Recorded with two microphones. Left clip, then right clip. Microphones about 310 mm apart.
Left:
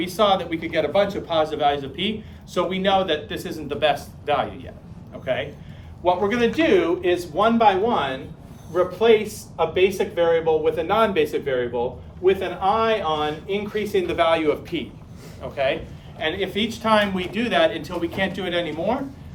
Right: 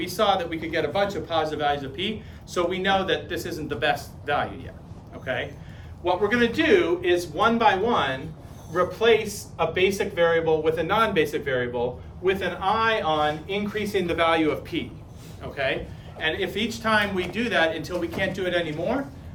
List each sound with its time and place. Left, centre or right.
0.0 s a man's voice: left